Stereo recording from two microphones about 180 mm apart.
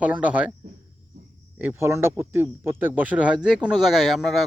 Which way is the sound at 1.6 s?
10° right (ahead or behind).